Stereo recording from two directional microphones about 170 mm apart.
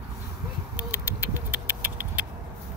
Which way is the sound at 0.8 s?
10° right (ahead or behind).